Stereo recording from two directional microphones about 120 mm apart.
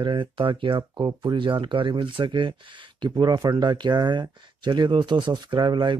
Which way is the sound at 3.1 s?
30° right (ahead or behind).